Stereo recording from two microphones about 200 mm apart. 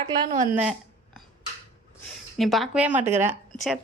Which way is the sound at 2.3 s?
Centre (ahead or behind).